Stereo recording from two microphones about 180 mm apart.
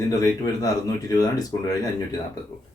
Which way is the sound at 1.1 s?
20° left (ahead or behind).